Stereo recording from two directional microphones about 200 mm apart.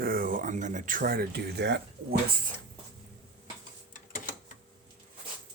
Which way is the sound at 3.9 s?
40° left (ahead or behind).